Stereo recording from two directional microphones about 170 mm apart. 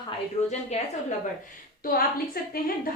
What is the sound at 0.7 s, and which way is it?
Speech, 40° left (ahead or behind).